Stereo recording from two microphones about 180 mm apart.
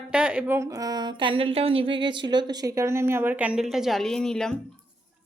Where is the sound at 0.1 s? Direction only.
5° right (ahead or behind).